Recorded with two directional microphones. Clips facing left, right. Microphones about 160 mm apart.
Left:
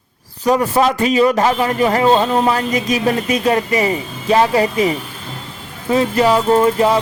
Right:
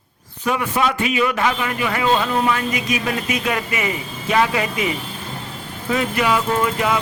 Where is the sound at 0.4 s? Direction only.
35° left (ahead or behind).